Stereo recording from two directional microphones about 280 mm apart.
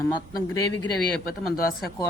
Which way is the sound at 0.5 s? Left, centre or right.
Centre.